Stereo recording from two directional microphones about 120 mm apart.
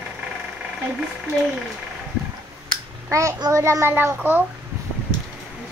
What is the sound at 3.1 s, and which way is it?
A child's voice, 25° right (ahead or behind).